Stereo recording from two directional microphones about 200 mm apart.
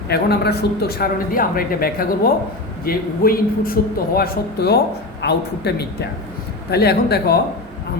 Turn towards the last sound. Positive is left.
turn(degrees=55)  # may be behind; listen again after turning